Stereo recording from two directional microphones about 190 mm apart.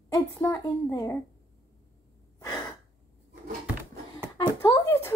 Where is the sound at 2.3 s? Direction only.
15° left (ahead or behind).